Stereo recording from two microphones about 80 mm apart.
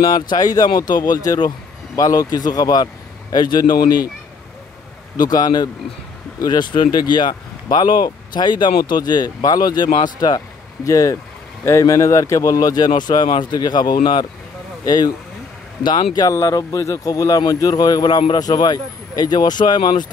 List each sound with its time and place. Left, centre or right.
0.0 s a man's voice: left
5.1 s speech: left
14.9 s a man's voice: left
15.8 s speech: left
16.3 s speech: left